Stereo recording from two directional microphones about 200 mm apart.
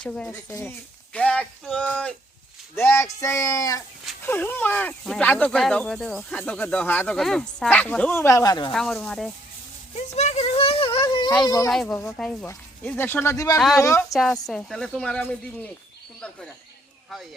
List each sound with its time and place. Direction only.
0.0 s speech: 5° left (ahead or behind)
8.7 s speech: centre (ahead or behind)
9.9 s speech: 35° left (ahead or behind)
11.0 s baby cry: 20° left (ahead or behind)
11.4 s speech: 20° left (ahead or behind)
11.7 s speech: centre (ahead or behind)
14.1 s speech: centre (ahead or behind)